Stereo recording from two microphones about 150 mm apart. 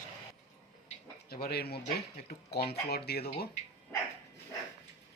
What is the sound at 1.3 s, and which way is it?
Speech, 90° left.